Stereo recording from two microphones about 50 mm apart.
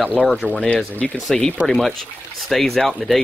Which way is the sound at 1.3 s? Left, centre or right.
Centre.